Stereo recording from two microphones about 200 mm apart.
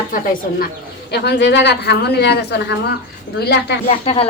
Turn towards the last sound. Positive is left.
turn(degrees=30)  # may be behind; listen again after turning